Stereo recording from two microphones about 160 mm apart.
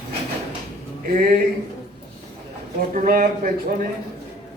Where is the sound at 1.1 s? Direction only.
55° right (ahead or behind).